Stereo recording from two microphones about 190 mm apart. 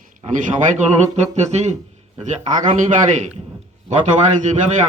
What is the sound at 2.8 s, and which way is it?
A man's voice, 35° right (ahead or behind).